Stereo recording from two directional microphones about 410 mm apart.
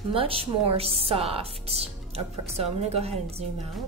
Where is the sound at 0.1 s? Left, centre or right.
Centre.